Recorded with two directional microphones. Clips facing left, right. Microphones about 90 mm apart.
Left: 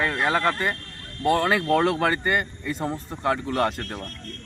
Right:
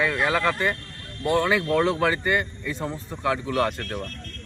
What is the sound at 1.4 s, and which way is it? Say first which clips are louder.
Speech: left 1 dB; 50° left (ahead or behind).